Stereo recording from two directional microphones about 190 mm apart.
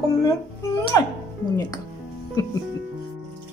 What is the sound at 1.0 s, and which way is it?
Speech, 20° left (ahead or behind).